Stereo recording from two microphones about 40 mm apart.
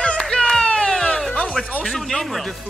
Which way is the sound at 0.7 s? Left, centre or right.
Left.